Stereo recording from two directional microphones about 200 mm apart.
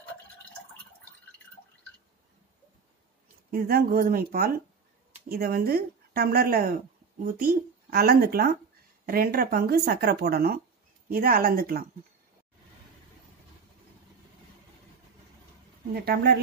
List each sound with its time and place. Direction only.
3.5 s speech: 45° right (ahead or behind)
15.9 s speech: 50° right (ahead or behind)